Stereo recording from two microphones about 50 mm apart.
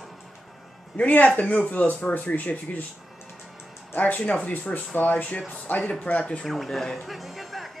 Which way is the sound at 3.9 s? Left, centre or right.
Left.